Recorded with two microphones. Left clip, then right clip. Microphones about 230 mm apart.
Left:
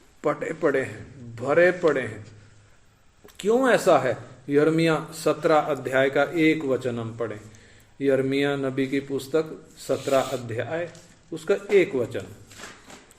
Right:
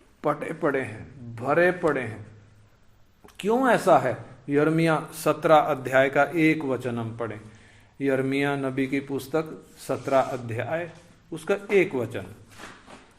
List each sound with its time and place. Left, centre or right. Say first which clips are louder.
0.2 s speech: left 2 dB; centre
3.2 s speech: left 1 dB; centre